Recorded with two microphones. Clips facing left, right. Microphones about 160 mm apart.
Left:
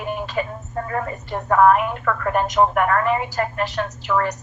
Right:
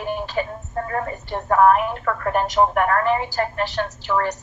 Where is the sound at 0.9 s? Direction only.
30° right (ahead or behind).